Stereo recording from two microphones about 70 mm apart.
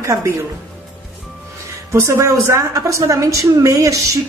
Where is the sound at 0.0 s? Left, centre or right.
Right.